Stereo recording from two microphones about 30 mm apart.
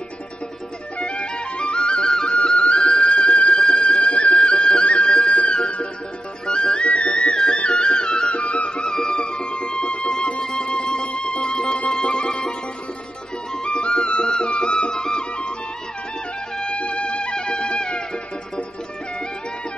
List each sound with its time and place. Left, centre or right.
0.9 s music: left
2.3 s music: left
3.5 s music: left
6.9 s music: left
8.4 s music: left
9.0 s music: left
13.7 s music: left
16.5 s music: left